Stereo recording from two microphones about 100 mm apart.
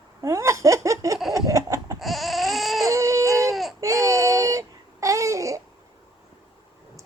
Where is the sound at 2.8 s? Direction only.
30° right (ahead or behind).